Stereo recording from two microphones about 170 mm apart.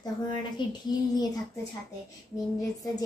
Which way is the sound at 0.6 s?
25° left (ahead or behind).